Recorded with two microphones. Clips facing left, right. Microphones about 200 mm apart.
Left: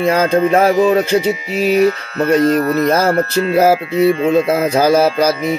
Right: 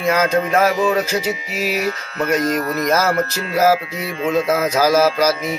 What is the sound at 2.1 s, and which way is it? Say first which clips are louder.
Music: left 5 dB; 30° left (ahead or behind).